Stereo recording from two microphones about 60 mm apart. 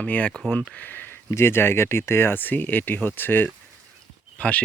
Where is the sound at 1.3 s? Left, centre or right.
Left.